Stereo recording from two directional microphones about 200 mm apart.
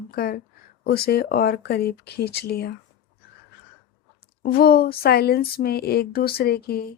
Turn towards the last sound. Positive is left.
turn(degrees=50)  # may be behind; listen again after turning